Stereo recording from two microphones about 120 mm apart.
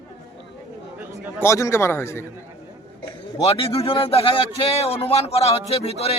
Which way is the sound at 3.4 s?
55° left (ahead or behind).